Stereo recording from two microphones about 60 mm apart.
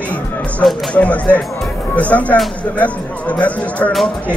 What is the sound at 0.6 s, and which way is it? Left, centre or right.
Speech, centre.